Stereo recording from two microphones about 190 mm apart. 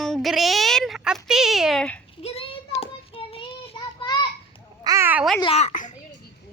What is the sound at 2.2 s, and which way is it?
Child singing, 30° left (ahead or behind).